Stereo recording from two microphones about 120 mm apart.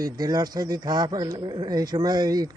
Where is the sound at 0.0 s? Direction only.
35° right (ahead or behind).